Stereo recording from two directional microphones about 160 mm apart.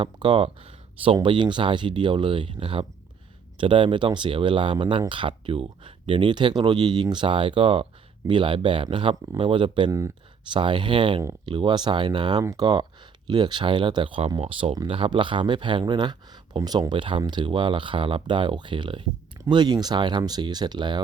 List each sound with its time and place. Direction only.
0.0 s speech: 30° right (ahead or behind)
14.4 s speech: 40° right (ahead or behind)